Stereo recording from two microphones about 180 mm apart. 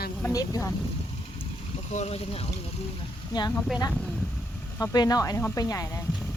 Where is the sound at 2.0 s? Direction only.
35° left (ahead or behind).